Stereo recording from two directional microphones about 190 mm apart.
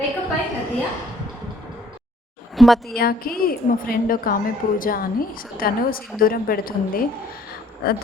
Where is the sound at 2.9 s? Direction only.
55° left (ahead or behind).